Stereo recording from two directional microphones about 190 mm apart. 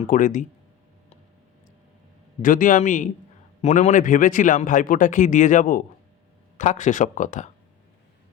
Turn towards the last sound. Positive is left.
turn(degrees=40)  # may be behind; listen again after turning